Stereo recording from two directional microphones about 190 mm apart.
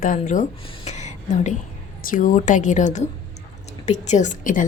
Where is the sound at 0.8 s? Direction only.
40° left (ahead or behind).